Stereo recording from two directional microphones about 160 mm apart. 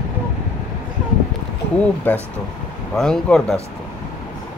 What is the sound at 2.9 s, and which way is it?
Speech, 5° left (ahead or behind).